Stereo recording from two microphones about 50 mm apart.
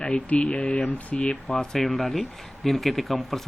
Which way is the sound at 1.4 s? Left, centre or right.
Centre.